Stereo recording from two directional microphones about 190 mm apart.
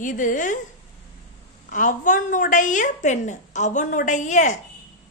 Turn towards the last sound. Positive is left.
turn(degrees=40)  # may be behind; listen again after turning